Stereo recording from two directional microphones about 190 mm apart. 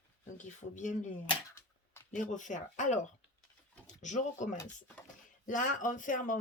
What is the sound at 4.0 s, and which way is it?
Speech, 40° left (ahead or behind).